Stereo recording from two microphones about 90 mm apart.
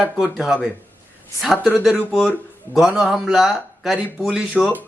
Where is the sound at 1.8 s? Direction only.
Centre (ahead or behind).